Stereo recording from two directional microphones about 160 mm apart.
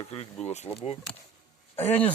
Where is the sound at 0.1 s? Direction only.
40° left (ahead or behind).